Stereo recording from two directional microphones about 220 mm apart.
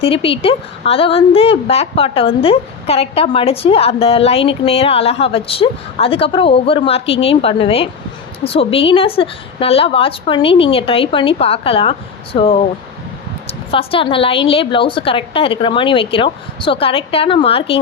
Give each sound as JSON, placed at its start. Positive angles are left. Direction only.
{"t": 0.0, "sound": "a woman's voice", "side_deg": 25}